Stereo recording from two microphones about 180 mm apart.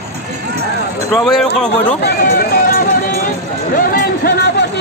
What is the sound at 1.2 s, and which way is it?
Speech, centre (ahead or behind).